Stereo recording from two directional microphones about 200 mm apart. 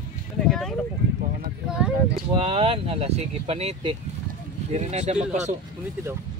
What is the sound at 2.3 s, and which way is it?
Speech, 30° right (ahead or behind).